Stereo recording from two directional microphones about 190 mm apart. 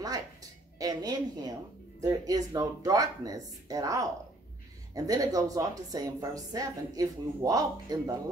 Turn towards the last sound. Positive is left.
turn(degrees=-20)  # may be behind; listen again after turning